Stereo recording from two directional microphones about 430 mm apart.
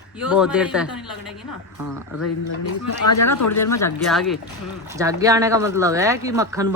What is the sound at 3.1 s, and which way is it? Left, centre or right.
Speech, left.